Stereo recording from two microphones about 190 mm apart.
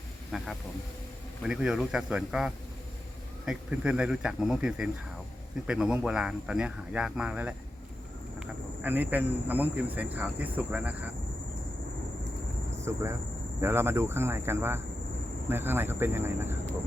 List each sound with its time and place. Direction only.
0.3 s speech: centre (ahead or behind)
12.8 s speech: 15° right (ahead or behind)